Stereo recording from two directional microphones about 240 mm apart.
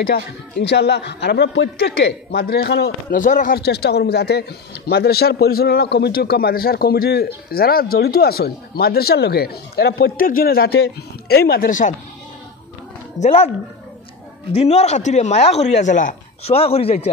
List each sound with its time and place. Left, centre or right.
0.6 s a man's voice: left
13.2 s speech: left
14.5 s speech: left